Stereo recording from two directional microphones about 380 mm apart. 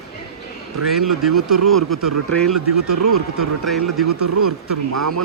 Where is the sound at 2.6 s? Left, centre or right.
Right.